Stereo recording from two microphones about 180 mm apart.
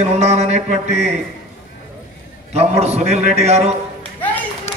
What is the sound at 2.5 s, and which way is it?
Speech, 35° right (ahead or behind).